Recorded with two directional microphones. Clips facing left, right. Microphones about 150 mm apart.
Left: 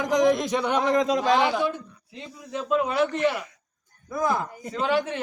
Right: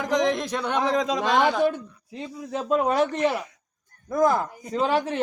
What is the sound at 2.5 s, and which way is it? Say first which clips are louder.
A man's voice: right 2 dB; 45° right (ahead or behind).